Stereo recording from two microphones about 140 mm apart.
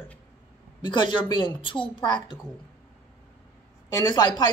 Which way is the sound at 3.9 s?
30° left (ahead or behind).